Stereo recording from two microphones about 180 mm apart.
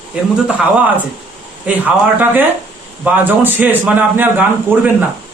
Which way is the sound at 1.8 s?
10° right (ahead or behind).